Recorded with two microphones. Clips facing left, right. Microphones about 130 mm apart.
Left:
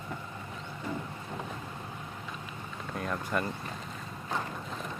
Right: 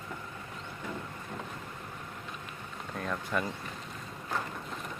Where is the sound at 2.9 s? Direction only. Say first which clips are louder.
Left 1 dB; centre (ahead or behind).